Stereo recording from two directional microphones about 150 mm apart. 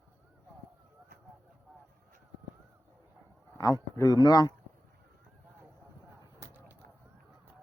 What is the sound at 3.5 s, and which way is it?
Speech, 25° left (ahead or behind).